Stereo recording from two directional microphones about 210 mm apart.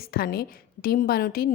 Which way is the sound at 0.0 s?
45° left (ahead or behind).